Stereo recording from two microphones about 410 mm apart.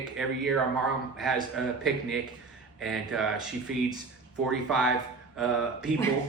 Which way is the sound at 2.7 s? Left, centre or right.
Centre.